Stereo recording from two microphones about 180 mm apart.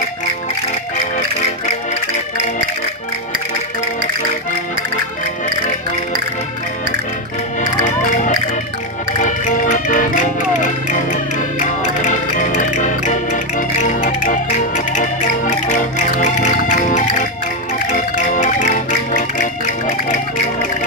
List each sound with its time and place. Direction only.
7.8 s music: 45° left (ahead or behind)
12.4 s music: 40° left (ahead or behind)